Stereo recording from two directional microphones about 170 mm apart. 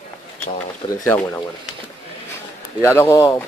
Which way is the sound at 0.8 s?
15° left (ahead or behind).